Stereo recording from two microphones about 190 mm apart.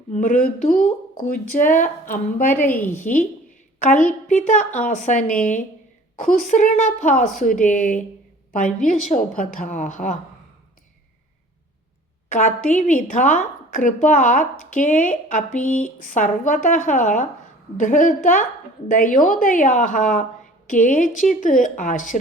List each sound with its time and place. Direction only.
0.1 s speech: 45° left (ahead or behind)
2.6 s a woman's voice: 10° left (ahead or behind)
3.0 s a woman's voice: 45° left (ahead or behind)
12.3 s a woman's voice: 40° left (ahead or behind)